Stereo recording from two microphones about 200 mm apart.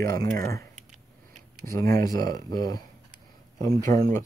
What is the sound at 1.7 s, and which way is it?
Speech, 15° left (ahead or behind).